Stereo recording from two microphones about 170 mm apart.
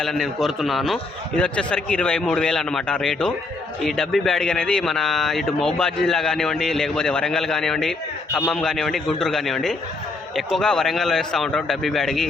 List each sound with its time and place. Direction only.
0.0 s speech: centre (ahead or behind)